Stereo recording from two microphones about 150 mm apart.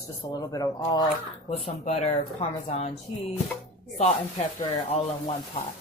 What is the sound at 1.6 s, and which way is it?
Speech, 50° left (ahead or behind).